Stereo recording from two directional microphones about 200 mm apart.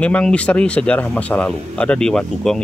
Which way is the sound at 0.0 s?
5° left (ahead or behind).